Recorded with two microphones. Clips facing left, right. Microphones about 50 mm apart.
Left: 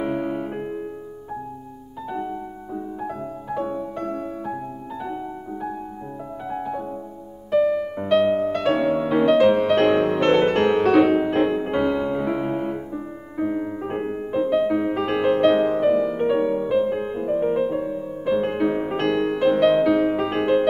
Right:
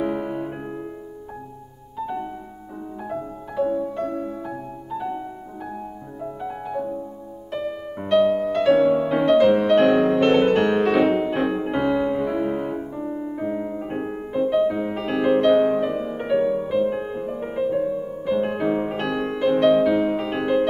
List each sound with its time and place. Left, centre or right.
0.0 s music: centre
3.0 s music: centre
6.5 s music: centre
12.3 s music: centre
16.6 s music: centre